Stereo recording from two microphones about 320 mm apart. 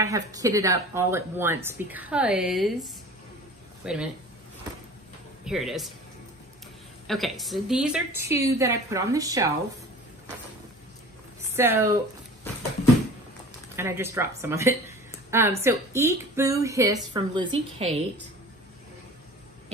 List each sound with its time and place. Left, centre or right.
0.0 s speech: centre
5.4 s speech: centre
7.1 s speech: centre
11.5 s speech: centre
13.7 s a woman's voice: centre